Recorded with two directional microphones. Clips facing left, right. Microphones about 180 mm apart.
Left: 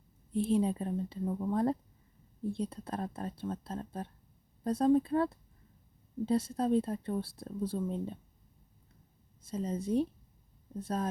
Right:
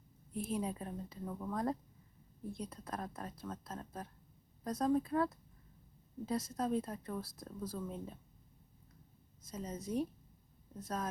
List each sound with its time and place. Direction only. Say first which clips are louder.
0.3 s speech: left 9 dB; 30° left (ahead or behind)
9.4 s speech: left 8 dB; 30° left (ahead or behind)